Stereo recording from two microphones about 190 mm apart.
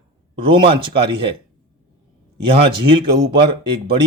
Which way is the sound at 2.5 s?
25° right (ahead or behind).